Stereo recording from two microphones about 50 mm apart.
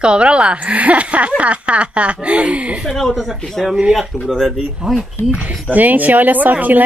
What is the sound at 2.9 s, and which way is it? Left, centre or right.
Speech, centre.